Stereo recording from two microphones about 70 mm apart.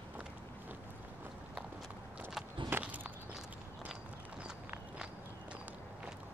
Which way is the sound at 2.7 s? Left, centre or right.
Right.